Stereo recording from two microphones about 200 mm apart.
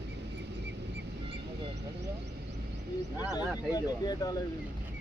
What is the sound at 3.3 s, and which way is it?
Speech, 20° left (ahead or behind).